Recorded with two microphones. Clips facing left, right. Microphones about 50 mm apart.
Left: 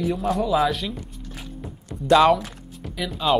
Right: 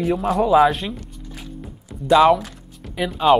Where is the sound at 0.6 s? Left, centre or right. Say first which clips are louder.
Right 5 dB; right.